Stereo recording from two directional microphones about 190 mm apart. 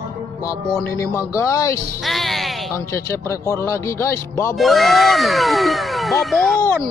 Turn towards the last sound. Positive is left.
turn(degrees=0)  # may be behind; listen again after turning